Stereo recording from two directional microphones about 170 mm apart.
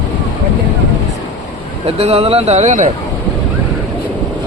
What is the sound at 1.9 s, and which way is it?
Speech, 35° right (ahead or behind).